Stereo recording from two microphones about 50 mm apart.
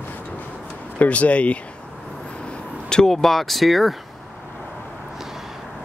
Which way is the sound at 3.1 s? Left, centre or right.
Centre.